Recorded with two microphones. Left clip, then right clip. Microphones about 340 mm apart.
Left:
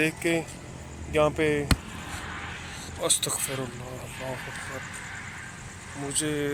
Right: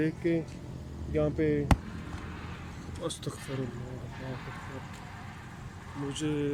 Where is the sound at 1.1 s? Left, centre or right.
Left.